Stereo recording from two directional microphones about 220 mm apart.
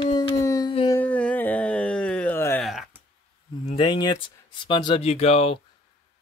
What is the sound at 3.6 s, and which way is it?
Speech, 25° left (ahead or behind).